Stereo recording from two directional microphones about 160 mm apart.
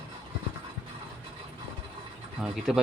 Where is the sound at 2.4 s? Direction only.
5° right (ahead or behind).